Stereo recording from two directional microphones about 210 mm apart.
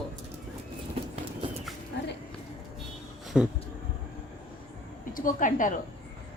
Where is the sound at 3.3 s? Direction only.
5° right (ahead or behind).